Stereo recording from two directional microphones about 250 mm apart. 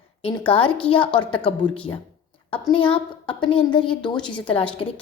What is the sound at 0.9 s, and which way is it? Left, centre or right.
Speech, centre.